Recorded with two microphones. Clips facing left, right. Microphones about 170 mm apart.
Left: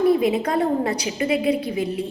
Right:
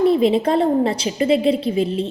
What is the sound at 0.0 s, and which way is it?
A woman's voice, 25° right (ahead or behind).